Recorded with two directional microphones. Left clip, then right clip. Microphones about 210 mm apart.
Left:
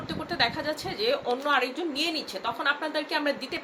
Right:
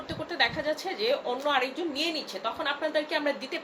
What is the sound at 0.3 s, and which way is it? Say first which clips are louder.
A woman's voice: even; 15° left (ahead or behind).